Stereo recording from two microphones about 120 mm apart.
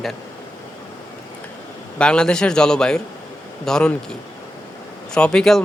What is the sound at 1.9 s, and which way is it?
A man's voice, 10° left (ahead or behind).